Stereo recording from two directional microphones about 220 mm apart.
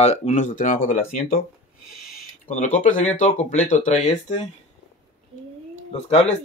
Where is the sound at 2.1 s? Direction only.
35° left (ahead or behind).